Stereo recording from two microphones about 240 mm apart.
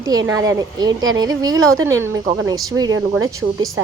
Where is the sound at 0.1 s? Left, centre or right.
Centre.